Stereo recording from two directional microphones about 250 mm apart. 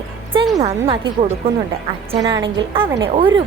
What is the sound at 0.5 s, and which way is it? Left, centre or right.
Speech, right.